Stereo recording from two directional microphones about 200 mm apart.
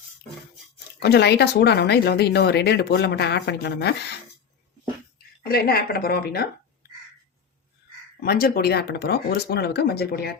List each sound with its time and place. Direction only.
0.9 s speech: 55° left (ahead or behind)
5.5 s speech: 50° left (ahead or behind)
8.2 s speech: 50° left (ahead or behind)